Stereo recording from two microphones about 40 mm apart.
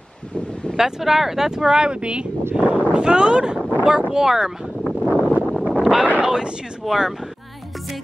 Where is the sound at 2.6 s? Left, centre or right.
Right.